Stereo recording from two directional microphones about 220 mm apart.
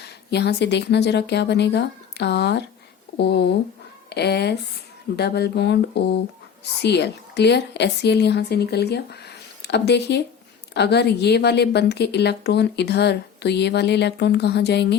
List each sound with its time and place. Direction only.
0.0 s a woman's voice: 50° left (ahead or behind)